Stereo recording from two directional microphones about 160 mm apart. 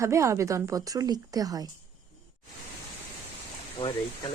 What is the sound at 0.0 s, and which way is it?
A woman's voice, 20° right (ahead or behind).